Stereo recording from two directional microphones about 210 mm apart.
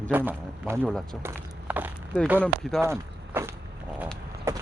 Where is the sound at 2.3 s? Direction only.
5° left (ahead or behind).